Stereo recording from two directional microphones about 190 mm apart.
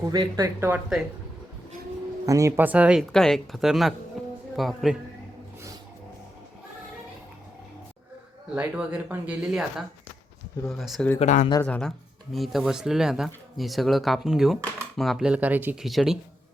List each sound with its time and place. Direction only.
0.0 s speech: 20° right (ahead or behind)
2.2 s speech: 15° right (ahead or behind)
4.2 s music: centre (ahead or behind)
4.5 s speech: centre (ahead or behind)
8.5 s speech: 10° right (ahead or behind)
11.2 s speech: 40° left (ahead or behind)
11.6 s speech: 5° left (ahead or behind)